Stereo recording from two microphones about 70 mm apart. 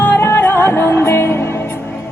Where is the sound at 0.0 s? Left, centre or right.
Left.